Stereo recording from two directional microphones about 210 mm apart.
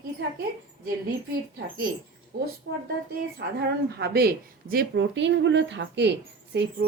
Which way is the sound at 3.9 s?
50° right (ahead or behind).